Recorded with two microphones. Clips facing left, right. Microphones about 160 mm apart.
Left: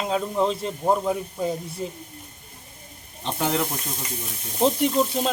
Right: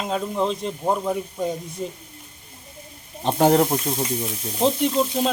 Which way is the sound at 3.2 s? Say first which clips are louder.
Right 8 dB; 45° right (ahead or behind).